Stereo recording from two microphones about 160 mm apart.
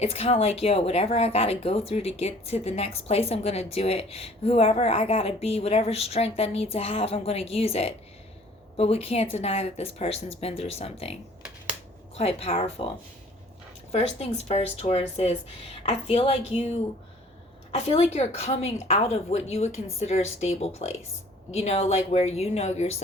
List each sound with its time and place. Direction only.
0.0 s a woman's voice: 40° left (ahead or behind)
13.9 s a woman's voice: 40° left (ahead or behind)
17.7 s a woman's voice: 40° left (ahead or behind)